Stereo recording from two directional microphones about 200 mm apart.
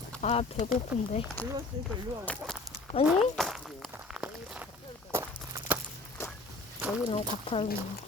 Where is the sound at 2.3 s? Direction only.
5° left (ahead or behind).